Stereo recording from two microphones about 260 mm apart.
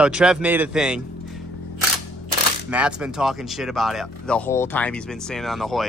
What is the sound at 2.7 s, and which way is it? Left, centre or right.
Speech, centre.